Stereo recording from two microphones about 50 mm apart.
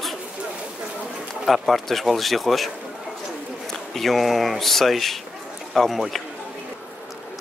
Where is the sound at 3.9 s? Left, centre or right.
Centre.